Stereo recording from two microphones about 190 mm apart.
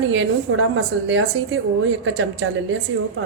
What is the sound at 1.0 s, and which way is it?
Speech, 75° right (ahead or behind).